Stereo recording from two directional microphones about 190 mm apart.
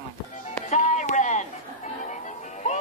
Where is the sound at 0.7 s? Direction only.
40° left (ahead or behind).